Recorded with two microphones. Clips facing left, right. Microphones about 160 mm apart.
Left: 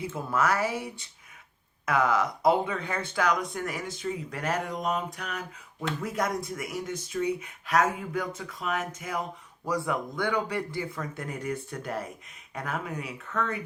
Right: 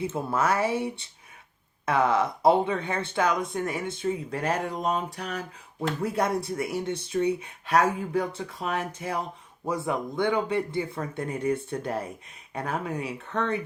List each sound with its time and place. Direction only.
0.0 s speech: 30° right (ahead or behind)